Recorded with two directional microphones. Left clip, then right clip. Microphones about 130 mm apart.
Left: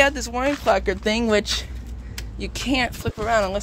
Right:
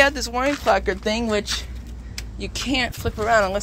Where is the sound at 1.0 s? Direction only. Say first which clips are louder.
Left 2 dB; 85° left.